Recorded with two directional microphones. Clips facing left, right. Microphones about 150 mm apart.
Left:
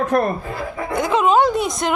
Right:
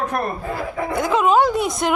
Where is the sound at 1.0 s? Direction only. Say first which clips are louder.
Left 1 dB; 5° right (ahead or behind).